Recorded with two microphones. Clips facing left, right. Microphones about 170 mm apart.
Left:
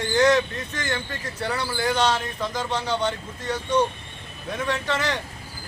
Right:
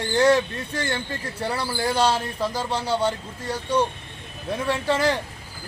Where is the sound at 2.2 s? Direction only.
35° right (ahead or behind).